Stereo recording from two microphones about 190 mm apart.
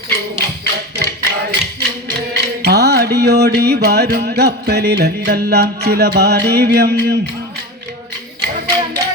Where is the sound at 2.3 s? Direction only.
60° right (ahead or behind).